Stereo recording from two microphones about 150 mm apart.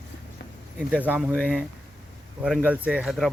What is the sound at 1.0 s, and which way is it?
Speech, 10° right (ahead or behind).